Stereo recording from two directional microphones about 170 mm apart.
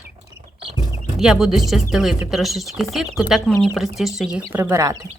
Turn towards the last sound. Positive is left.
turn(degrees=-20)  # may be behind; listen again after turning